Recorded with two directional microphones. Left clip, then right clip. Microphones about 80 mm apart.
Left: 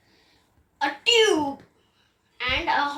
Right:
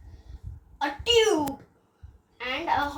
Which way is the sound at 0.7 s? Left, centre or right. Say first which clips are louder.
Left 2 dB; right.